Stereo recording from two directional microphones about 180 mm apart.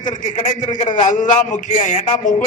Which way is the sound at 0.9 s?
45° left (ahead or behind).